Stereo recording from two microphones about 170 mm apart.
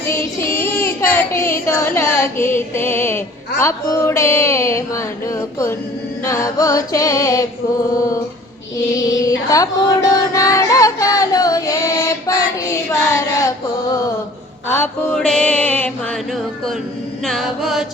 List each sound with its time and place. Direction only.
0.1 s child singing: 15° left (ahead or behind)
3.6 s speech: 15° left (ahead or behind)
6.2 s music: 20° left (ahead or behind)
9.0 s music: 20° left (ahead or behind)
15.1 s speech: 5° left (ahead or behind)
17.2 s chant: centre (ahead or behind)